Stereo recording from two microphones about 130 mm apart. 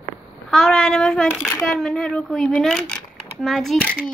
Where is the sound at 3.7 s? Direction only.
10° left (ahead or behind).